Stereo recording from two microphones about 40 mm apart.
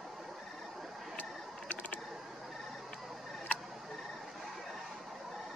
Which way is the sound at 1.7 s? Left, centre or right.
Left.